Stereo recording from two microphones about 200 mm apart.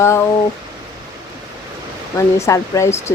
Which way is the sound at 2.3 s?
15° left (ahead or behind).